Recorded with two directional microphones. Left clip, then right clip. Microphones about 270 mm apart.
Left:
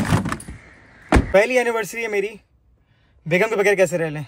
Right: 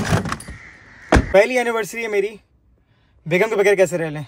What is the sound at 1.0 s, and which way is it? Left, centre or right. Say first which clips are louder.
A man's voice: right 2 dB; centre.